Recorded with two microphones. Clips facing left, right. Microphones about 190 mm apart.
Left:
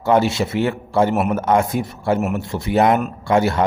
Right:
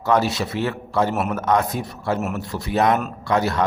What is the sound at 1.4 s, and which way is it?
Speech, 25° left (ahead or behind).